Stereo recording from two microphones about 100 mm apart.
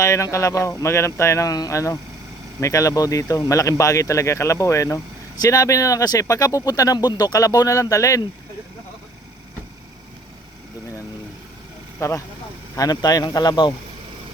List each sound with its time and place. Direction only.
0.0 s speech: 30° left (ahead or behind)
11.9 s speech: 30° left (ahead or behind); by 13.7 s 45° left (ahead or behind)